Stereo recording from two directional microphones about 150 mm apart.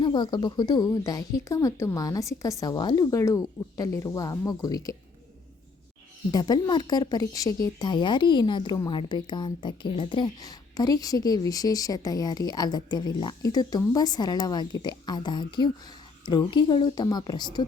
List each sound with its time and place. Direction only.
0.0 s a woman's voice: 30° left (ahead or behind)
6.3 s a woman's voice: 25° left (ahead or behind)